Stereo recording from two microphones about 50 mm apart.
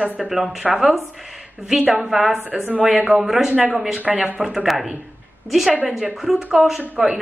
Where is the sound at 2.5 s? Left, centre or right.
Centre.